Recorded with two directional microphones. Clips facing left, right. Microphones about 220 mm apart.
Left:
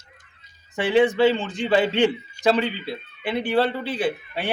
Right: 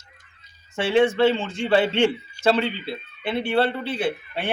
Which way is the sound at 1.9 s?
15° left (ahead or behind).